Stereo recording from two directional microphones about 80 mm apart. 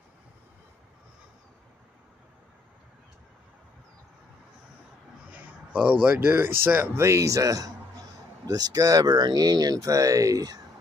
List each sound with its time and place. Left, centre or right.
5.3 s a sound: centre
6.0 s speech: right
7.0 s speech: right